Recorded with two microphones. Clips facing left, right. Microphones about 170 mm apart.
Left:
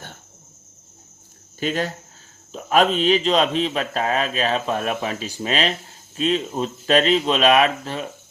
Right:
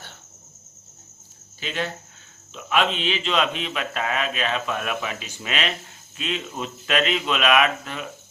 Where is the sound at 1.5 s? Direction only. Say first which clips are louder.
Left 5 dB; 40° left (ahead or behind).